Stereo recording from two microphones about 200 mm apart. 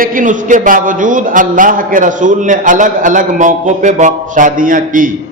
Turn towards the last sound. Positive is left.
turn(degrees=-40)  # may be behind; listen again after turning